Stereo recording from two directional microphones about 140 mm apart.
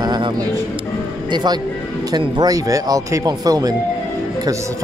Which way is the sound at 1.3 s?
30° right (ahead or behind).